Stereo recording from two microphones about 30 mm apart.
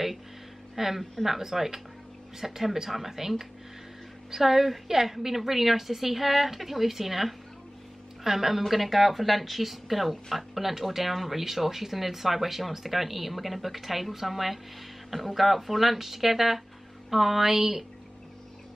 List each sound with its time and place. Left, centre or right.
0.7 s speech: centre